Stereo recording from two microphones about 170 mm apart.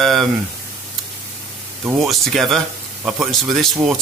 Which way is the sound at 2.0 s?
Centre (ahead or behind).